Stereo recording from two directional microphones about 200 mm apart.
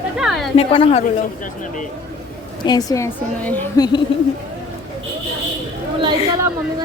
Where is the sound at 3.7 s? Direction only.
20° left (ahead or behind).